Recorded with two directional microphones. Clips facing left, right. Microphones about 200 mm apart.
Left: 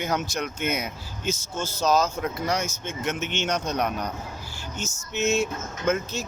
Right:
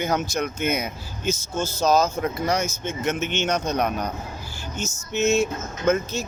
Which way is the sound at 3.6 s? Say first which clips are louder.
Right 3 dB; 50° right (ahead or behind).